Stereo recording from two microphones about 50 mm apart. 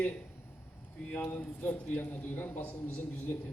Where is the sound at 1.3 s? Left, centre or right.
Left.